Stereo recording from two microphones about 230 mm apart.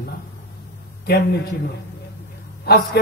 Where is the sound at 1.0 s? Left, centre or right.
Left.